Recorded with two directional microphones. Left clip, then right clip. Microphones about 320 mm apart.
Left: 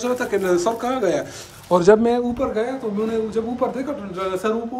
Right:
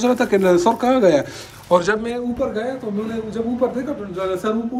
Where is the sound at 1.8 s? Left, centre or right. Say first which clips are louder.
Left 6 dB; left.